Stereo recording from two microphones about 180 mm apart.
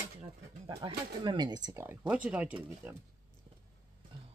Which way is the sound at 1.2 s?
25° right (ahead or behind).